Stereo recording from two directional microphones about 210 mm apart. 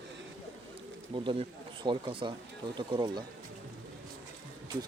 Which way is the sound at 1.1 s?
25° right (ahead or behind).